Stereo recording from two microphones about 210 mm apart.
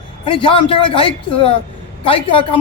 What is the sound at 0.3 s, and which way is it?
A woman's voice, 25° left (ahead or behind).